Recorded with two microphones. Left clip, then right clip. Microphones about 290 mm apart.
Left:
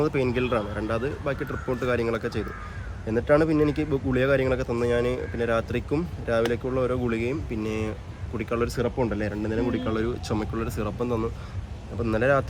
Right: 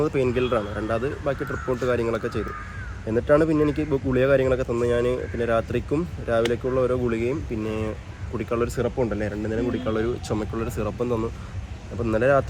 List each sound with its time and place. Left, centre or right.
0.0 s speech: centre